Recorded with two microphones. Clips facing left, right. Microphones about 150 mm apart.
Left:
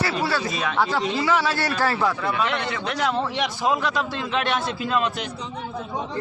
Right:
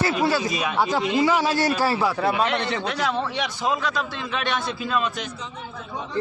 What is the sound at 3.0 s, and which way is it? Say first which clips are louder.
A man's voice: left 4 dB; 15° left (ahead or behind).